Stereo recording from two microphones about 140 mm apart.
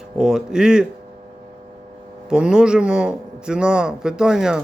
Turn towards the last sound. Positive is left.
turn(degrees=-5)  # may be behind; listen again after turning